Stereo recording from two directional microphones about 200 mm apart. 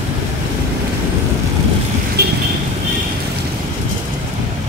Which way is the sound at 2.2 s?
55° right (ahead or behind).